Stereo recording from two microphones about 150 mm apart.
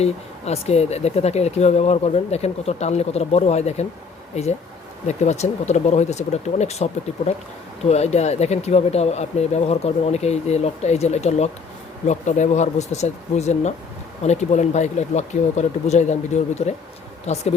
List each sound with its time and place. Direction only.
0.0 s speech: 45° left (ahead or behind)
7.9 s speech: 45° left (ahead or behind)